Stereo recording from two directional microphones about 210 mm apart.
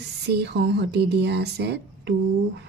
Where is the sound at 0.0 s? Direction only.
55° right (ahead or behind).